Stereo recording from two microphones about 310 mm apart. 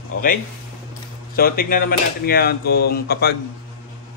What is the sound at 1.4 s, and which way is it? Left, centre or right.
A man's voice, left.